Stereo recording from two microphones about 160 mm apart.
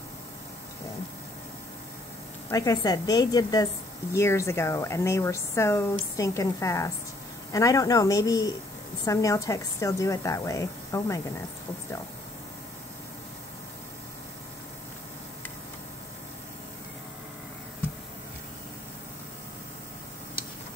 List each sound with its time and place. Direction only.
2.5 s a woman's voice: 20° left (ahead or behind)